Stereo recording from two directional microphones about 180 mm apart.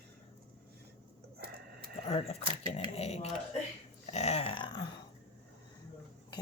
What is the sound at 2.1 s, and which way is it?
Speech, 35° left (ahead or behind).